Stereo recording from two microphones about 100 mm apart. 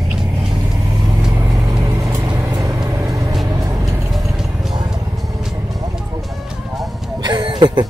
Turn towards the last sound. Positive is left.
turn(degrees=-45)  # may be behind; listen again after turning